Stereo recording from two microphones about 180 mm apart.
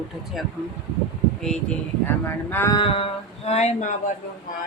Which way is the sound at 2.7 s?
30° left (ahead or behind).